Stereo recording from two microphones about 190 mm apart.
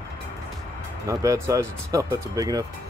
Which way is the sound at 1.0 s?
15° right (ahead or behind).